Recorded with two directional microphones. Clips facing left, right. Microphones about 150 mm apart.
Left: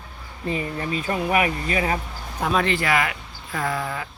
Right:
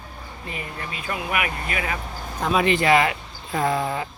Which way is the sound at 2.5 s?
15° right (ahead or behind).